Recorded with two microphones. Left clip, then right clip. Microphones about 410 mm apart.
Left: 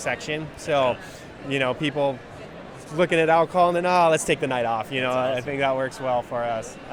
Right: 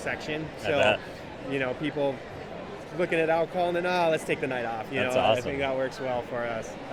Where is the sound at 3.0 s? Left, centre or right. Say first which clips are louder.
Left 6 dB; left.